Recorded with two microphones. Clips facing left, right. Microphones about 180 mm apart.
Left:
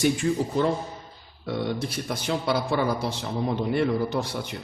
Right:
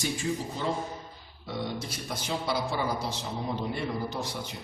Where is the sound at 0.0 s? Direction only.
60° left (ahead or behind).